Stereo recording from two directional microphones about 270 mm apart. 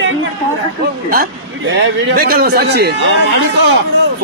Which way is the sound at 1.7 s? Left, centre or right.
Right.